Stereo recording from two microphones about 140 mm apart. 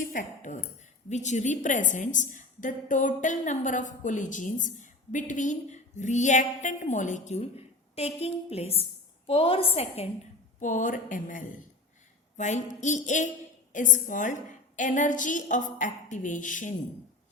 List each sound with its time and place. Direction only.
0.0 s a woman's voice: 70° left (ahead or behind); by 10.1 s 45° left (ahead or behind)
10.6 s speech: 65° left (ahead or behind)
12.4 s a woman's voice: 60° left (ahead or behind)